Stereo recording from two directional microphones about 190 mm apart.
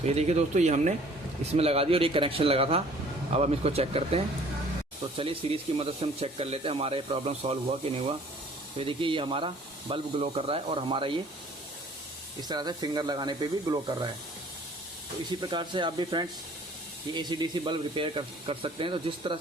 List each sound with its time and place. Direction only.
0.0 s speech: 35° right (ahead or behind)
8.8 s speech: 25° right (ahead or behind)
12.4 s speech: 20° right (ahead or behind)
15.4 s speech: 25° right (ahead or behind)